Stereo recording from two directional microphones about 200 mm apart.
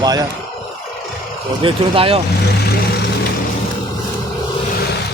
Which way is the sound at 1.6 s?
25° right (ahead or behind).